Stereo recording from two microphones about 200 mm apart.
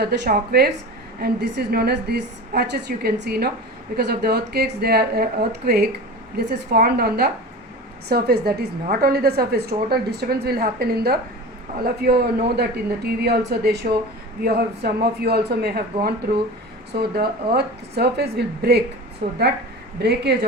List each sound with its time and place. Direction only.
0.0 s a woman's voice: 50° right (ahead or behind)
16.9 s speech: 50° right (ahead or behind)
19.2 s speech: 35° right (ahead or behind)
20.0 s speech: 55° right (ahead or behind)